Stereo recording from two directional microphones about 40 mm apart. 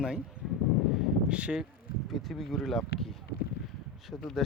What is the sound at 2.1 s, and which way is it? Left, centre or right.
Speech, centre.